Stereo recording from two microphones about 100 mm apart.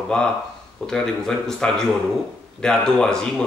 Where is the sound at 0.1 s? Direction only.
5° left (ahead or behind).